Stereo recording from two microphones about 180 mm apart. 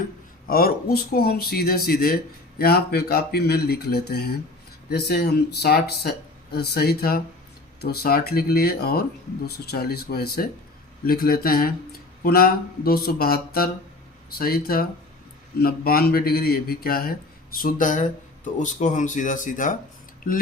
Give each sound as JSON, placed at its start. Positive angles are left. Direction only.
{"t": 0.4, "sound": "speech", "side_deg": 55}